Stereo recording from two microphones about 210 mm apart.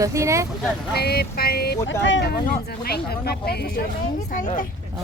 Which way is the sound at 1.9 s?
60° left (ahead or behind).